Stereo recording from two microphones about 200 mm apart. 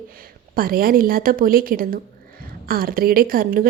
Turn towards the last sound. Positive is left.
turn(degrees=-45)  # may be behind; listen again after turning